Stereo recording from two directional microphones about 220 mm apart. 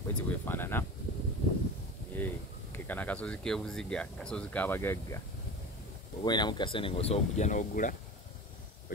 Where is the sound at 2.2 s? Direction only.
5° left (ahead or behind).